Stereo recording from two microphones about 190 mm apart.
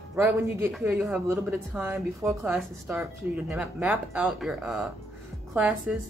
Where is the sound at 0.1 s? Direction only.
15° right (ahead or behind).